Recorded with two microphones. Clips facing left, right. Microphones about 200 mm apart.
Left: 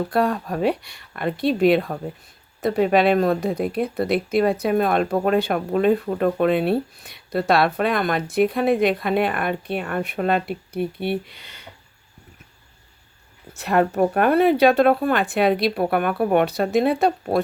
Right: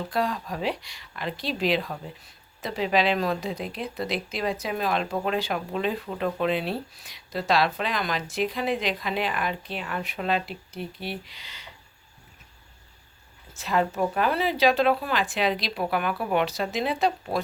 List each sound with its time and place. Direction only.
0.0 s speech: 60° left (ahead or behind)
13.5 s speech: 65° left (ahead or behind)